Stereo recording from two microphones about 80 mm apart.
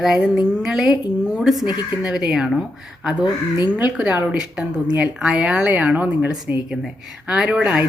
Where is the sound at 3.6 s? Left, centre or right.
Centre.